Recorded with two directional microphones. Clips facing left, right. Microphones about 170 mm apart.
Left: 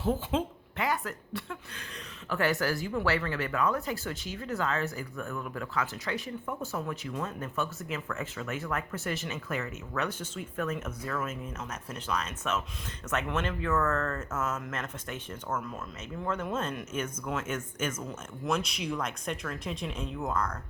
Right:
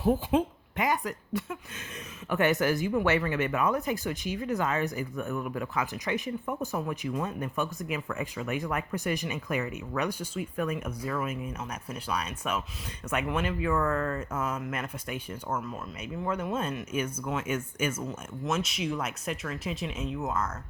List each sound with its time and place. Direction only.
0.0 s speech: 15° right (ahead or behind)